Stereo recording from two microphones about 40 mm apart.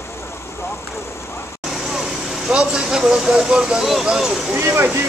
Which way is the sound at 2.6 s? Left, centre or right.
Right.